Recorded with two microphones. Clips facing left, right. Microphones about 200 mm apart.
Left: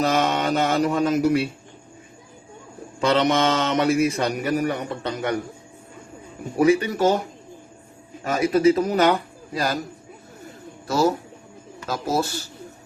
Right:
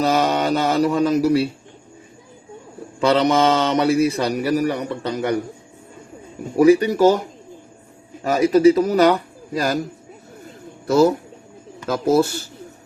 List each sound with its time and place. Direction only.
0.0 s speech: 35° right (ahead or behind)
3.0 s speech: 35° right (ahead or behind)
6.7 s speech: 40° right (ahead or behind)
11.9 s speech: 55° right (ahead or behind)